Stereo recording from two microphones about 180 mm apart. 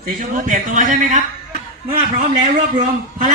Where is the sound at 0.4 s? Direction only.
45° right (ahead or behind).